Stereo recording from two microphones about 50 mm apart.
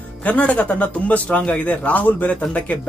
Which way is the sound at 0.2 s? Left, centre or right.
Left.